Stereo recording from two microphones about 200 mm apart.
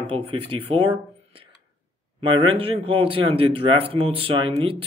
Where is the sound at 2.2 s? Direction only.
25° right (ahead or behind).